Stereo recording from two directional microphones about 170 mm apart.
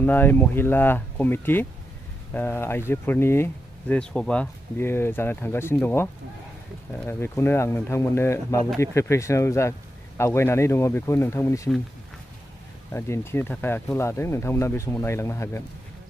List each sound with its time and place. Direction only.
0.0 s speech: 10° left (ahead or behind)
7.1 s speech: 15° left (ahead or behind)
12.9 s speech: 15° left (ahead or behind)